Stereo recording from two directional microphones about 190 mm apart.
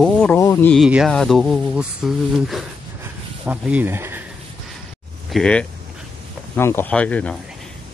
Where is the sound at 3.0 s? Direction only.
10° right (ahead or behind).